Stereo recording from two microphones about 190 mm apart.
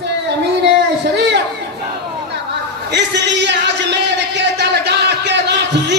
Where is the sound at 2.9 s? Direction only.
65° right (ahead or behind).